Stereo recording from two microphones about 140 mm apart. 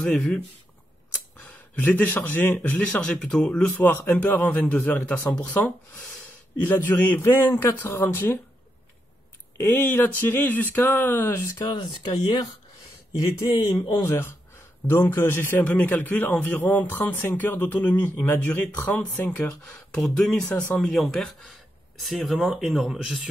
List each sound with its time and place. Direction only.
0.0 s a man's voice: 5° left (ahead or behind)
1.4 s a man's voice: 10° left (ahead or behind)
9.6 s a man's voice: 15° left (ahead or behind)
11.5 s speech: 30° left (ahead or behind)
14.0 s a man's voice: 15° left (ahead or behind)
20.4 s a man's voice: 10° left (ahead or behind)